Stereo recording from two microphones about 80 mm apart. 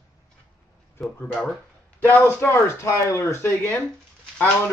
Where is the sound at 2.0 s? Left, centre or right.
Left.